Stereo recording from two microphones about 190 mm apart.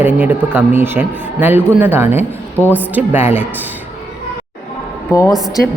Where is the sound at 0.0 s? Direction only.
10° right (ahead or behind).